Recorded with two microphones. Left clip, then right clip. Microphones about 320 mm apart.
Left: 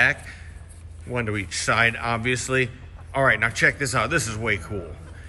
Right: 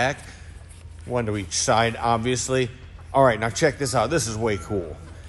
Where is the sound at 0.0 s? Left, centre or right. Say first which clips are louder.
Left 4 dB; centre.